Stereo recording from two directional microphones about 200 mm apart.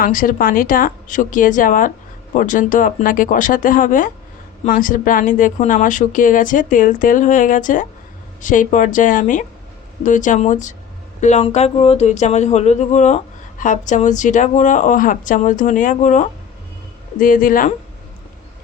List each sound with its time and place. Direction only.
0.0 s speech: 45° left (ahead or behind)